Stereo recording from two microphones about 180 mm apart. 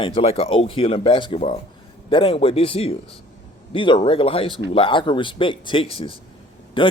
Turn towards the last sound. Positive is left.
turn(degrees=30)  # may be behind; listen again after turning